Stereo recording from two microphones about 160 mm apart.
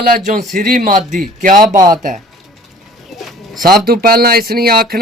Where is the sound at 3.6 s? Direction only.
70° right (ahead or behind).